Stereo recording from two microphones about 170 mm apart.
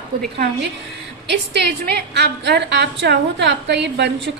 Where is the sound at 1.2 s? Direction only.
80° right.